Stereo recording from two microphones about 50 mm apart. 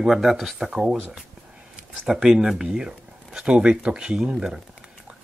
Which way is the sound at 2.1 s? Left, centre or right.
Centre.